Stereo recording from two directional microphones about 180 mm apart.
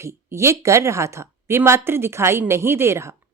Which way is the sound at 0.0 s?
15° right (ahead or behind).